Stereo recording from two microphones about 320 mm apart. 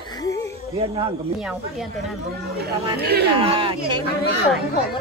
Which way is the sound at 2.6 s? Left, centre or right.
Right.